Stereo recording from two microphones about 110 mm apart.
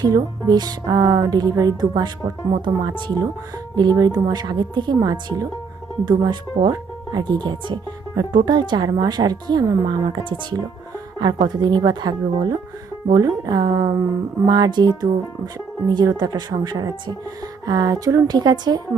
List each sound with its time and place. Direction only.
0.0 s speech: 40° right (ahead or behind)